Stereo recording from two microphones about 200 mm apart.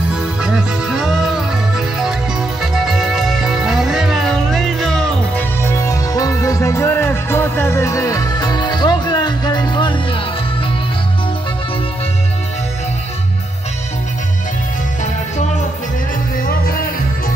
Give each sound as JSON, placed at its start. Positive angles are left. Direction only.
{"t": 0.4, "sound": "music", "side_deg": -5}
{"t": 5.6, "sound": "music", "side_deg": 15}